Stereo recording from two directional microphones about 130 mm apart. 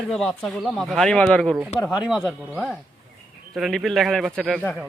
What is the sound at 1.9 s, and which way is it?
Speech, 5° right (ahead or behind).